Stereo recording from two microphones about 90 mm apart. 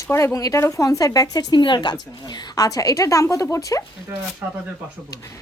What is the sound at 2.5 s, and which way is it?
Speech, 40° left (ahead or behind).